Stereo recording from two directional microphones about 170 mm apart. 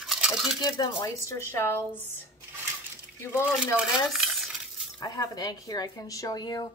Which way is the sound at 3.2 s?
15° left (ahead or behind).